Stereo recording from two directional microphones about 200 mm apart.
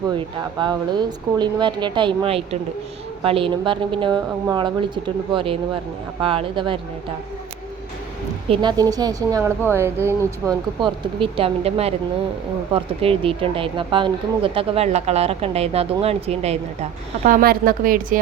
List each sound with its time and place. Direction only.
0.2 s speech: 20° right (ahead or behind)
8.4 s speech: 20° right (ahead or behind)
10.8 s speech: 25° right (ahead or behind)
17.2 s a woman's voice: 45° right (ahead or behind)